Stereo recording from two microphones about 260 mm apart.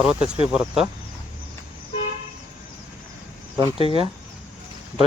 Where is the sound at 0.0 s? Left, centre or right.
Centre.